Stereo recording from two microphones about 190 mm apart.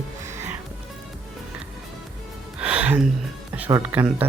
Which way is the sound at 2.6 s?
5° right (ahead or behind).